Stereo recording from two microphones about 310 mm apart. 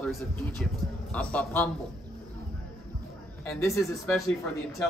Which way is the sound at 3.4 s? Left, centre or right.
Centre.